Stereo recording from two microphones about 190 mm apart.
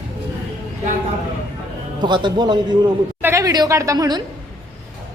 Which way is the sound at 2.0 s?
25° right (ahead or behind).